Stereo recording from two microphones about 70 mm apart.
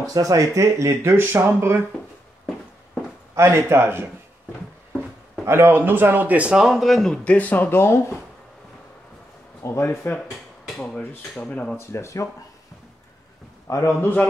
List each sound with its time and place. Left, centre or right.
0.0 s speech: right
3.3 s speech: right
5.4 s speech: right; by 6.6 s centre
6.6 s speech: centre
7.3 s speech: left
7.8 s speech: left
9.6 s speech: left
10.8 s speech: centre
11.7 s speech: left
13.7 s a man's voice: left